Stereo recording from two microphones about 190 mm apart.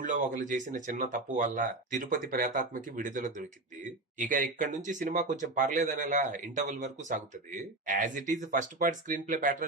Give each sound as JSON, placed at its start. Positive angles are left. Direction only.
{"t": 0.0, "sound": "speech", "side_deg": -45}